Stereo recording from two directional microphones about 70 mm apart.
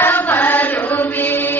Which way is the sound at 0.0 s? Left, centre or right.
Left.